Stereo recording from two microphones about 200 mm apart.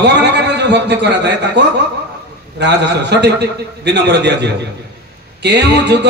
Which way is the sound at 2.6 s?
60° right (ahead or behind).